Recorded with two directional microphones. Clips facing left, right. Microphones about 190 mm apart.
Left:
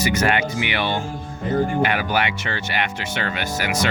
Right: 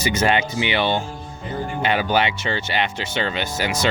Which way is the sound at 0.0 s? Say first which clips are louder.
Even; 25° right (ahead or behind).